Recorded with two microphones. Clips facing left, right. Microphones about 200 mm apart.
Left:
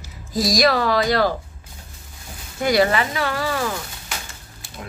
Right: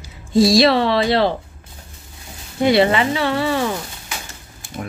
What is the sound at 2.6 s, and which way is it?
Speech, 25° right (ahead or behind).